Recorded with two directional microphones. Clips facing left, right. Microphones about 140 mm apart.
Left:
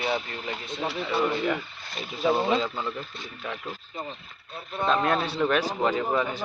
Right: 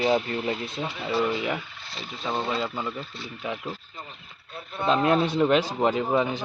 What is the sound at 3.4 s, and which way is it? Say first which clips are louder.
Speech: right 3 dB; 15° right (ahead or behind).